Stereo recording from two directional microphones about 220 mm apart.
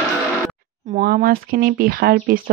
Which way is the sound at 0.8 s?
35° right (ahead or behind).